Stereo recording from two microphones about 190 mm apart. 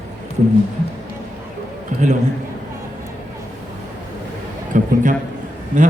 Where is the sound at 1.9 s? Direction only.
40° right (ahead or behind).